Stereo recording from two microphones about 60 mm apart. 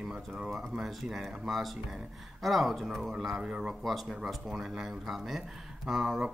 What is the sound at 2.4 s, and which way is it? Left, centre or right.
Speech, centre.